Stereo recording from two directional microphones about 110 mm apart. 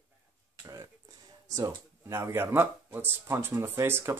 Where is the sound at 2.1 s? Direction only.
25° right (ahead or behind).